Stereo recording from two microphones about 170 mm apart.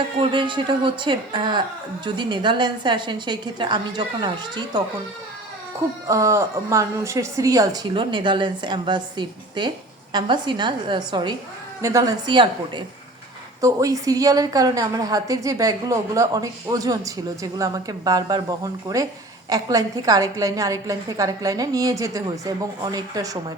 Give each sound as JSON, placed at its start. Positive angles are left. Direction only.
{"t": 0.2, "sound": "a woman's voice", "side_deg": -30}
{"t": 6.1, "sound": "a woman's voice", "side_deg": -20}